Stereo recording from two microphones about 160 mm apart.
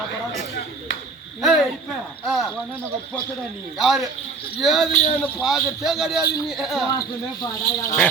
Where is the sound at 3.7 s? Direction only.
Centre (ahead or behind).